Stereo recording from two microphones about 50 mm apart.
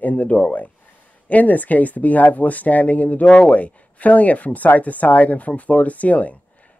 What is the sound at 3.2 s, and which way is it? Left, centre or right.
Speech, centre.